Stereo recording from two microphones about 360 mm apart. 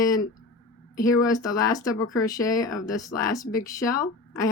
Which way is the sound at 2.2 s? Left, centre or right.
Centre.